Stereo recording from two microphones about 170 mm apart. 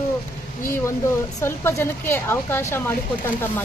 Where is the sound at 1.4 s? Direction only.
15° left (ahead or behind).